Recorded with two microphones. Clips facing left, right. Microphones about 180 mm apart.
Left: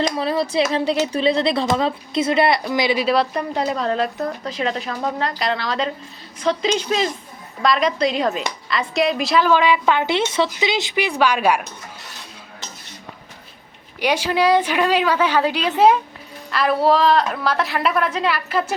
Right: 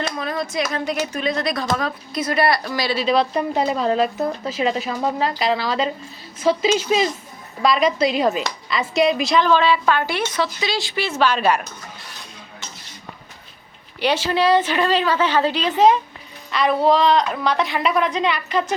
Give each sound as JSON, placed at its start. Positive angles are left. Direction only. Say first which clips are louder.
{"t": 0.2, "sound": "speech", "louder": "left 5 dB", "side_deg": 30}
{"t": 3.1, "sound": "a woman's voice", "louder": "right 1 dB", "side_deg": 0}
{"t": 14.0, "sound": "a woman's voice", "louder": "even", "side_deg": 10}